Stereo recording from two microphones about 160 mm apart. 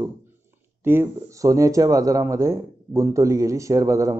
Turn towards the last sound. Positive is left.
turn(degrees=-20)  # may be behind; listen again after turning